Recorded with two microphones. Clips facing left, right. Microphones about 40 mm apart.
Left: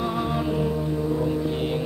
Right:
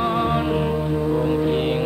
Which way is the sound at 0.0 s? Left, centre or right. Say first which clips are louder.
Right 5 dB; right.